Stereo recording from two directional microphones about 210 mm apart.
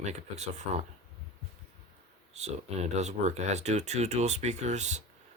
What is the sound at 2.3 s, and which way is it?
Speech, 30° right (ahead or behind).